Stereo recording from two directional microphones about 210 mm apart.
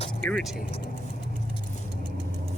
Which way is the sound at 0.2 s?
5° left (ahead or behind).